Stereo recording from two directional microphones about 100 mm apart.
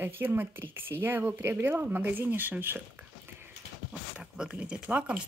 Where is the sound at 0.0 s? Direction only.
20° right (ahead or behind).